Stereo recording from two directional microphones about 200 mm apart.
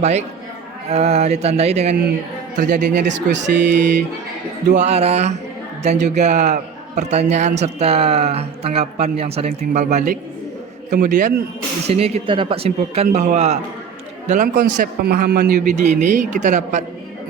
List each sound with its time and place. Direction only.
0.0 s speech: 35° right (ahead or behind)
3.5 s speech: 60° right (ahead or behind)
4.7 s speech: 35° right (ahead or behind)
11.9 s a man's voice: 30° right (ahead or behind); by 15.6 s 50° right (ahead or behind)
15.7 s speech: 35° right (ahead or behind)